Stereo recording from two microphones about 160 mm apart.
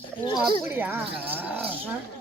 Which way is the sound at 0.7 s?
10° right (ahead or behind).